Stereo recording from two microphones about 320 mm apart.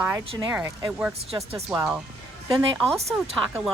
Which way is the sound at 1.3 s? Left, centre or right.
Centre.